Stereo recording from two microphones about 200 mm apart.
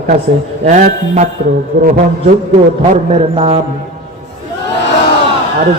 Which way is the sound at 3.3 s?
30° right (ahead or behind).